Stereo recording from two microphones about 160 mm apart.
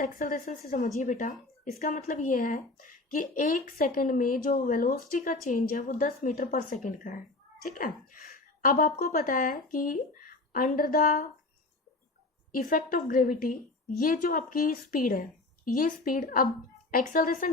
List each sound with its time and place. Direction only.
0.0 s a woman's voice: 60° left (ahead or behind)
12.5 s speech: 60° left (ahead or behind)